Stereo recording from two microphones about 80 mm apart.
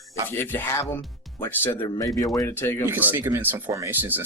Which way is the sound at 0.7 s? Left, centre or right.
Left.